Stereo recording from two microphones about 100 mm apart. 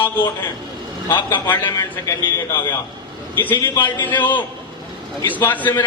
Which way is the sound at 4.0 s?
20° left (ahead or behind).